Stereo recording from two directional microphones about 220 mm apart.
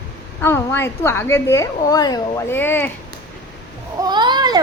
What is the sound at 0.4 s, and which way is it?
A woman's voice, 10° left (ahead or behind).